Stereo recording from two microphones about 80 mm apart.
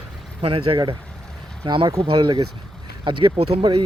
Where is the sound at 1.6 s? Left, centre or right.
Right.